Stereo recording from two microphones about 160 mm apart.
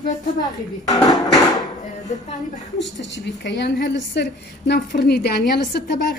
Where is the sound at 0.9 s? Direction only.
25° left (ahead or behind).